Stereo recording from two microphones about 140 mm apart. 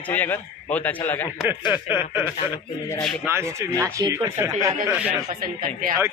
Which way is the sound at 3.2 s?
20° right (ahead or behind).